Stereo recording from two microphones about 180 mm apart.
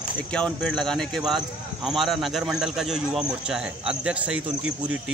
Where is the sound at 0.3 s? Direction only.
5° left (ahead or behind).